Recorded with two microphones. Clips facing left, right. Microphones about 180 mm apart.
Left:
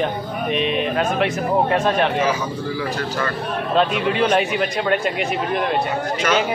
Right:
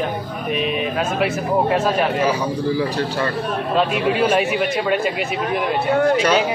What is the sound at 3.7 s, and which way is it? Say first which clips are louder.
Speech: even; 5° right (ahead or behind).